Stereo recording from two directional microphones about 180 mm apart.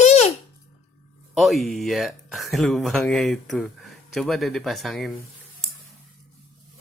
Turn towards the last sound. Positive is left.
turn(degrees=0)  # may be behind; listen again after turning